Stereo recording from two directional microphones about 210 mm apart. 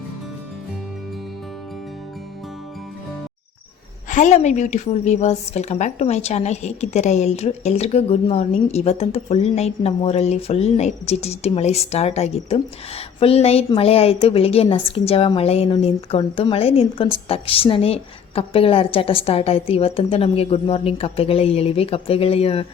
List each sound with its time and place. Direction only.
4.1 s a woman's voice: 35° left (ahead or behind)